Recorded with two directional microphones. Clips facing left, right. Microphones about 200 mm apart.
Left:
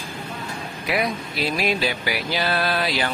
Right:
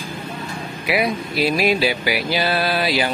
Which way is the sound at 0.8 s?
10° right (ahead or behind).